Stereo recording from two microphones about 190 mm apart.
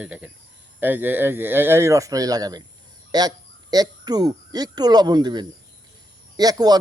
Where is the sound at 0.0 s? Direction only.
5° right (ahead or behind).